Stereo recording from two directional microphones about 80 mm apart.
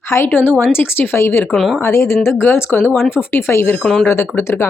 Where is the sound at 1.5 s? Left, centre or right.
Centre.